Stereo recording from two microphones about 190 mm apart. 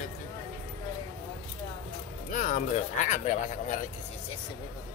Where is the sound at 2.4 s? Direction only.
45° left (ahead or behind).